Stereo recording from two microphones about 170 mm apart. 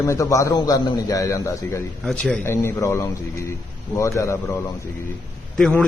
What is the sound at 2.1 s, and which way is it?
Speech, 5° left (ahead or behind).